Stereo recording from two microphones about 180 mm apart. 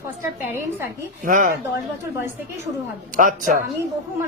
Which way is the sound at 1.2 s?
45° right (ahead or behind).